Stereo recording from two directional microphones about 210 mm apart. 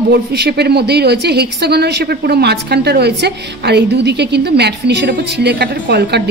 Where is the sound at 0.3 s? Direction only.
50° right (ahead or behind).